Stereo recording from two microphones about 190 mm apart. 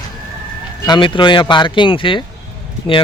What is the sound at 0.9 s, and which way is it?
Speech, 25° left (ahead or behind).